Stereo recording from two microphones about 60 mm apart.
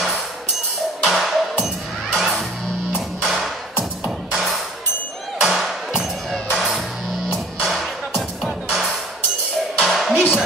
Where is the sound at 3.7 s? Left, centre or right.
Centre.